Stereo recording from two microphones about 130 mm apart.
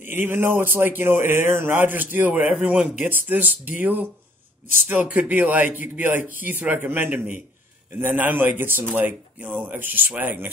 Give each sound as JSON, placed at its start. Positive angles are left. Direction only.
{"t": 0.0, "sound": "speech", "side_deg": -15}